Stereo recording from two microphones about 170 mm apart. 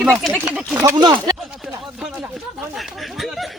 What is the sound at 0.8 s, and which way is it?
Speech, 20° right (ahead or behind).